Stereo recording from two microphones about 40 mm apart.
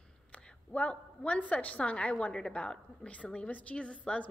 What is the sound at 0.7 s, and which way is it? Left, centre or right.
A woman's voice, left.